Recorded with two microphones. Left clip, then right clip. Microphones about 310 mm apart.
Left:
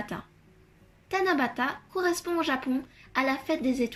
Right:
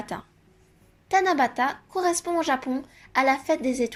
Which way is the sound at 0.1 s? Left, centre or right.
Right.